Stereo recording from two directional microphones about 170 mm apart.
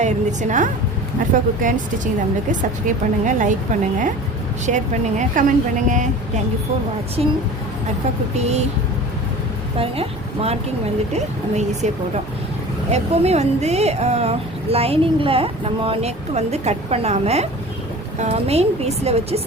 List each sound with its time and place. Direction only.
0.0 s a woman's voice: 45° right (ahead or behind)
4.6 s speech: 45° right (ahead or behind)
7.2 s speech: 35° right (ahead or behind)
8.4 s speech: 40° right (ahead or behind)
9.7 s speech: 35° right (ahead or behind)